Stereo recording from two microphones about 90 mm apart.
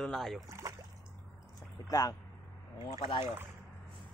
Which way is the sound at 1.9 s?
40° left (ahead or behind).